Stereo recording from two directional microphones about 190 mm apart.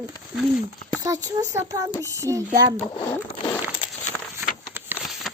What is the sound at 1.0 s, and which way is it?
Speech, 20° right (ahead or behind).